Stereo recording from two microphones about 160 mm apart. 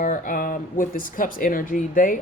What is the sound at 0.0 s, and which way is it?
Speech, 55° left (ahead or behind).